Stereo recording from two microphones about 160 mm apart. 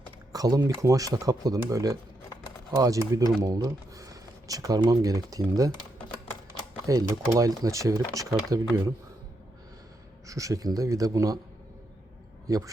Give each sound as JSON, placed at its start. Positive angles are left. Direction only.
{"t": 0.3, "sound": "speech", "side_deg": -20}
{"t": 6.8, "sound": "speech", "side_deg": -20}
{"t": 10.2, "sound": "speech", "side_deg": -20}
{"t": 12.5, "sound": "speech", "side_deg": -20}